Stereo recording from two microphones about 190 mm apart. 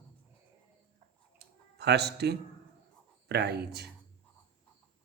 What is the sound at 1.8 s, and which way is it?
Speech, 60° right (ahead or behind).